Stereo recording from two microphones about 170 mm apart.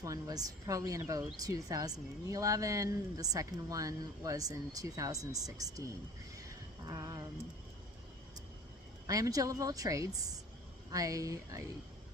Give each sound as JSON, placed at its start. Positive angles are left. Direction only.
{"t": 0.0, "sound": "a woman's voice", "side_deg": -20}
{"t": 9.0, "sound": "a woman's voice", "side_deg": -20}